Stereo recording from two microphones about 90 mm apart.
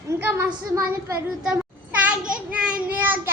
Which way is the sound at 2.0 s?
10° right (ahead or behind).